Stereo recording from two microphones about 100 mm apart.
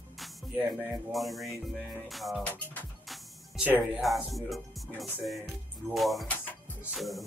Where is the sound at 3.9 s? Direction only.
Centre (ahead or behind).